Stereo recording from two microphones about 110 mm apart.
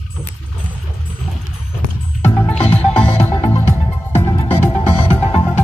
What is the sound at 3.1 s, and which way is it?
Music, 75° left (ahead or behind).